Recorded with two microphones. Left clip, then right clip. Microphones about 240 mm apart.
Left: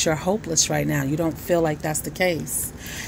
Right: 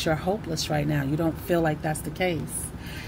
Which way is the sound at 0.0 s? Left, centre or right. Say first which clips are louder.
Left 4 dB; left.